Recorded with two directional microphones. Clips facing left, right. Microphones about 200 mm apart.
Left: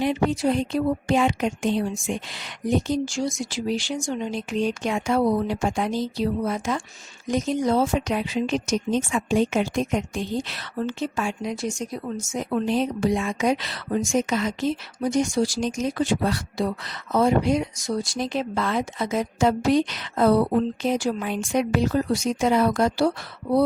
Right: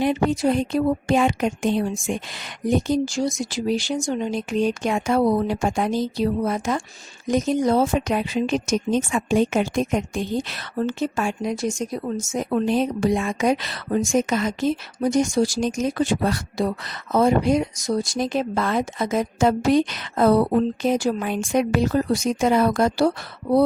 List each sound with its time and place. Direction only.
0.0 s speech: 50° right (ahead or behind)